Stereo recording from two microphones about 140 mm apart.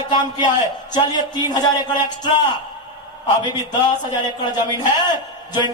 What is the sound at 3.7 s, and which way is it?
Speech, 30° left (ahead or behind).